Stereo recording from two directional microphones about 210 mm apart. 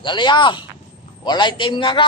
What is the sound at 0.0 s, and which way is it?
A man's voice, 20° left (ahead or behind).